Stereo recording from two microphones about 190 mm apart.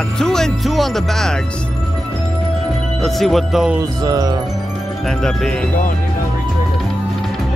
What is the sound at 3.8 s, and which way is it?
Chime, 20° right (ahead or behind).